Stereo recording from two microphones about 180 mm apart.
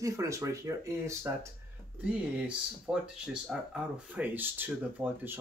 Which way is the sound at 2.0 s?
5° right (ahead or behind).